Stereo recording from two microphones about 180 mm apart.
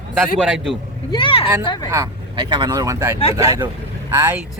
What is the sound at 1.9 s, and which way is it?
Speech, 20° right (ahead or behind).